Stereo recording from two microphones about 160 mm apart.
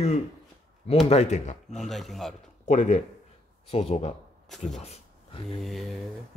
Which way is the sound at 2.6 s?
45° left (ahead or behind).